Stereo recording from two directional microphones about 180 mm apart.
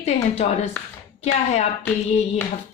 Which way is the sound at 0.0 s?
35° left (ahead or behind).